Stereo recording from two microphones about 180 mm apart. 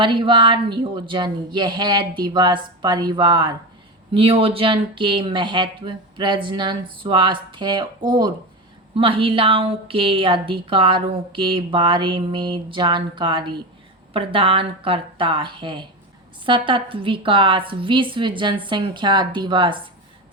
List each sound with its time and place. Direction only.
0.0 s a woman's voice: 25° right (ahead or behind)